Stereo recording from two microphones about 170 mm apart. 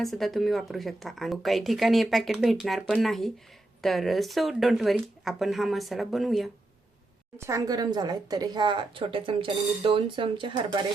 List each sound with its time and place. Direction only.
0.0 s speech: centre (ahead or behind)
7.3 s a woman's voice: 15° right (ahead or behind)